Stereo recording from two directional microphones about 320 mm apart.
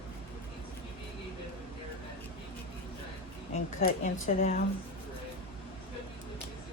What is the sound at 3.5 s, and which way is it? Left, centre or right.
Speech, left.